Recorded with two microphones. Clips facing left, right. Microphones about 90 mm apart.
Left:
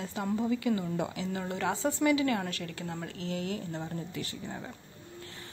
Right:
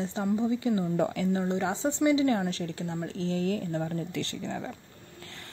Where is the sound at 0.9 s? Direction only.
50° right (ahead or behind).